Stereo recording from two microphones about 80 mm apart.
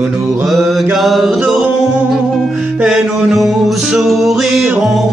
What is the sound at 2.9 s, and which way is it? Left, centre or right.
Music, centre.